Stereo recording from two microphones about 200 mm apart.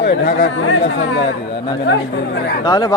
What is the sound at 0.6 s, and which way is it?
Speech, 70° left (ahead or behind).